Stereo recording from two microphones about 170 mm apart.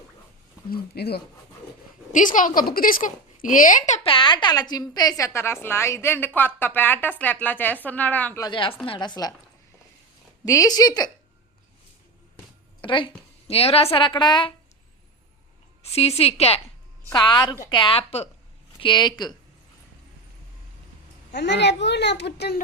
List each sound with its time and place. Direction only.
0.7 s speech: 70° left (ahead or behind)
2.1 s a woman's voice: 50° left (ahead or behind); by 8.4 s 10° left (ahead or behind)
8.4 s speech: 30° left (ahead or behind)
10.4 s speech: 20° left (ahead or behind)
12.8 s a woman's voice: 30° left (ahead or behind)
15.8 s a woman's voice: 35° left (ahead or behind)
17.1 s a woman's voice: 25° left (ahead or behind)
21.3 s a child's voice: 90° left